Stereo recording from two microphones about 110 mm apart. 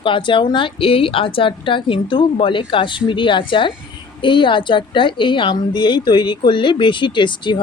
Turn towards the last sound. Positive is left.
turn(degrees=45)  # may be behind; listen again after turning